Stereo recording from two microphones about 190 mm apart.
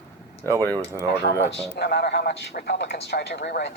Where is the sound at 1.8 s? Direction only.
60° left (ahead or behind).